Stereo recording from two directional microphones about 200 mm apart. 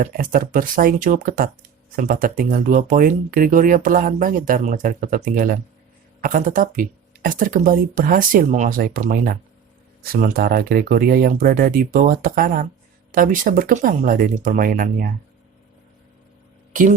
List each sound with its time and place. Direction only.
0.0 s speech: 40° right (ahead or behind)